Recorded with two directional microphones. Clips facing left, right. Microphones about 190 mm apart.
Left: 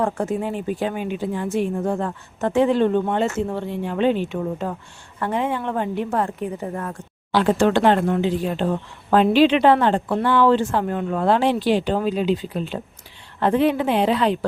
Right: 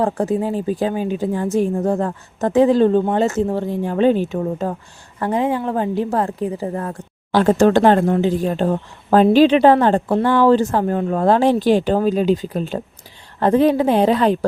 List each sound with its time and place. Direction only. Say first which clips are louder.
0.0 s speech: right 4 dB; 35° right (ahead or behind)
7.3 s speech: right 4 dB; 45° right (ahead or behind)